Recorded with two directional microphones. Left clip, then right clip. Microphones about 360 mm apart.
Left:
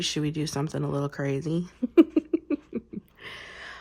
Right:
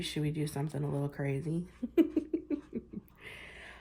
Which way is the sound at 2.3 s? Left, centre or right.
Centre.